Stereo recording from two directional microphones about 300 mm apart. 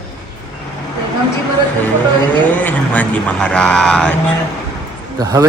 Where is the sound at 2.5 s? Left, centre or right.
Centre.